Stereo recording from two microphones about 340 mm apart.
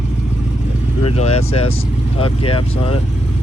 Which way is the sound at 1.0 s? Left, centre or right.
Centre.